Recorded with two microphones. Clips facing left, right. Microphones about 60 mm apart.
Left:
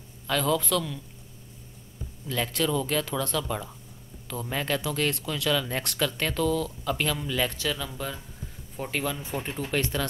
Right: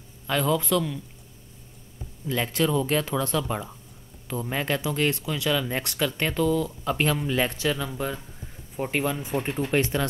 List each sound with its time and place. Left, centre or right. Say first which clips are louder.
0.3 s speech: right 2 dB; centre
2.2 s speech: right 3 dB; centre
6.8 s speech: right 3 dB; right